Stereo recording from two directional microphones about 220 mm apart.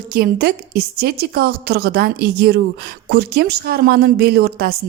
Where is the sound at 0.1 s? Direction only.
45° right (ahead or behind).